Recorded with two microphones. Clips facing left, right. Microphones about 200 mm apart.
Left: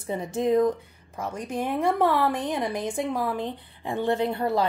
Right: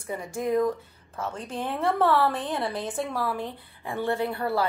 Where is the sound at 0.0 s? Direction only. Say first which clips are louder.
Left 4 dB; 20° left (ahead or behind).